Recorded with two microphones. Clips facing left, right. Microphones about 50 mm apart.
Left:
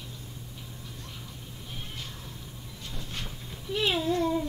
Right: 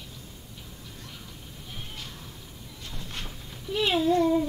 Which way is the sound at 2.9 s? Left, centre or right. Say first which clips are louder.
Even; right.